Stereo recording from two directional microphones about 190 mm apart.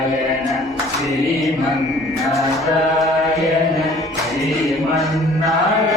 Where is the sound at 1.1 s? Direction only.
Centre (ahead or behind).